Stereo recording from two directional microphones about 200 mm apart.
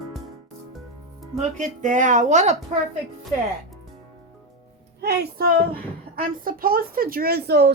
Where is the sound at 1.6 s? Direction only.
40° right (ahead or behind).